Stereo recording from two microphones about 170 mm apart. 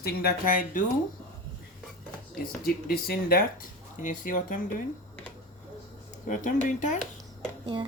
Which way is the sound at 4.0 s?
50° left (ahead or behind).